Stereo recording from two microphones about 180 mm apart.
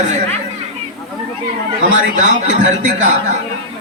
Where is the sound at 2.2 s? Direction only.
45° right (ahead or behind).